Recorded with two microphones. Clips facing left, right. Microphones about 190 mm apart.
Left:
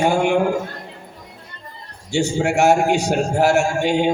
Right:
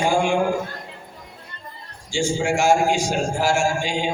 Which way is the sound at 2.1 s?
65° left (ahead or behind).